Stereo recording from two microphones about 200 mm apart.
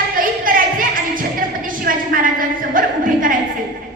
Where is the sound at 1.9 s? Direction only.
45° right (ahead or behind).